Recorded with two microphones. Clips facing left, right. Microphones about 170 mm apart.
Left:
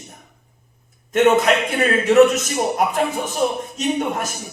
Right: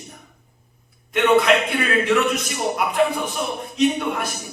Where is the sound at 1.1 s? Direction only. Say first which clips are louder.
Left 1 dB; 45° left (ahead or behind).